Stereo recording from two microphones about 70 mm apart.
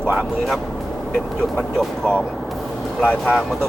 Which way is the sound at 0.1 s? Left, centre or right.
Centre.